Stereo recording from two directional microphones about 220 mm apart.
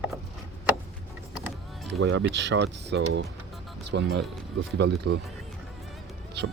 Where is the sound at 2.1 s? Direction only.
55° right (ahead or behind).